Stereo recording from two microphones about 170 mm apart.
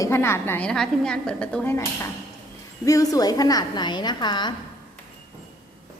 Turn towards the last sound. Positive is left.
turn(degrees=25)  # may be behind; listen again after turning